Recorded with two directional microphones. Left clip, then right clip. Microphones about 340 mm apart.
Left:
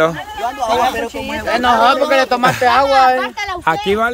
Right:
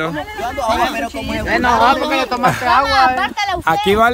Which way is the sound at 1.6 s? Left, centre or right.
Left.